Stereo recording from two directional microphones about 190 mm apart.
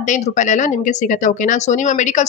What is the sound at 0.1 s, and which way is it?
Speech, 40° left (ahead or behind).